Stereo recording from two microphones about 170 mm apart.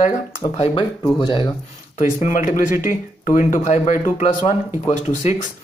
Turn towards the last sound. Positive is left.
turn(degrees=40)  # may be behind; listen again after turning